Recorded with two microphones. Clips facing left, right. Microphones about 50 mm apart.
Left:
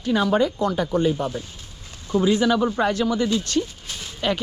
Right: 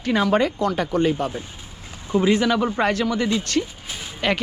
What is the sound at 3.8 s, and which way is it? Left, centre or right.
Music, centre.